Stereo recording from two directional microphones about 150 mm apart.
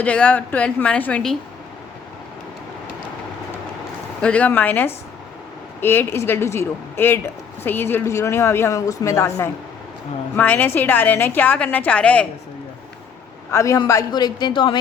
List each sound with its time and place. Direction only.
0.0 s a woman's voice: 10° left (ahead or behind)
4.2 s a woman's voice: 10° left (ahead or behind)
13.5 s speech: 20° left (ahead or behind)